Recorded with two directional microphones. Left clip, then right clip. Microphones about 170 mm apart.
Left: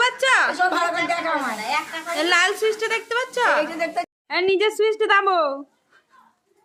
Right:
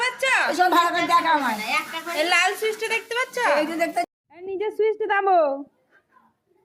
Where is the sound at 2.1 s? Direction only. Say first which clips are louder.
Left 2 dB; 20° left (ahead or behind).